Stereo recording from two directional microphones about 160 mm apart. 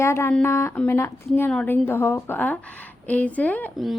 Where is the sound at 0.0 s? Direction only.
15° left (ahead or behind).